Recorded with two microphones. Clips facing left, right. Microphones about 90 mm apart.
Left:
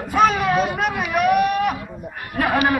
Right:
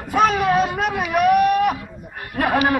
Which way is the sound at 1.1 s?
Centre (ahead or behind).